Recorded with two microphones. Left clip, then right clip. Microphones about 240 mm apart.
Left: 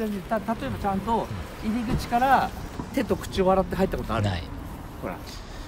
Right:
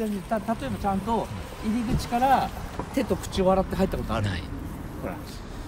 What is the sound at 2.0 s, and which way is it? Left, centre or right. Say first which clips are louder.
Speech: left 1 dB; centre.